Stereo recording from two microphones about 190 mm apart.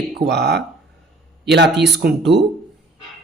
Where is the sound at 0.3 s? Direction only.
60° right (ahead or behind).